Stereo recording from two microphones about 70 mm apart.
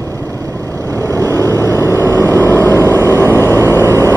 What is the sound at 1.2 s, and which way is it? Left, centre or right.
Vehicle, left.